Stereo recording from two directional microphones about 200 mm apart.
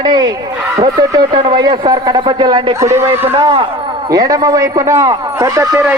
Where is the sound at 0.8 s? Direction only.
20° right (ahead or behind).